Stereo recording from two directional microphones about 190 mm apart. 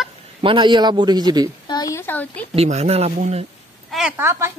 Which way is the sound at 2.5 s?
35° right (ahead or behind).